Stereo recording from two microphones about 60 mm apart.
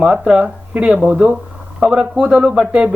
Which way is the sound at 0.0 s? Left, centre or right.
Centre.